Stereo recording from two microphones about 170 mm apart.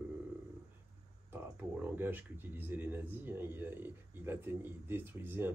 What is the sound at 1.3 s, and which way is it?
Speech, 10° right (ahead or behind).